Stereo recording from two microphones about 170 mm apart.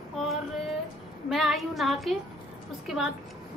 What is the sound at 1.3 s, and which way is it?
A woman's voice, centre (ahead or behind).